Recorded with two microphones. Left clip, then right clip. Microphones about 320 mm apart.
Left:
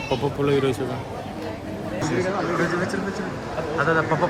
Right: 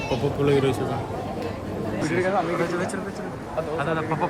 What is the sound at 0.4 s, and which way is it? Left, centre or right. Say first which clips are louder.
Speech: even; centre.